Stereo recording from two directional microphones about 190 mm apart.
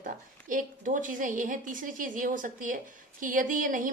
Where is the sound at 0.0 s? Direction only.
45° right (ahead or behind).